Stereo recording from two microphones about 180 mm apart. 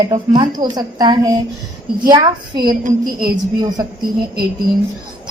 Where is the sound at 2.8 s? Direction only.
55° right (ahead or behind).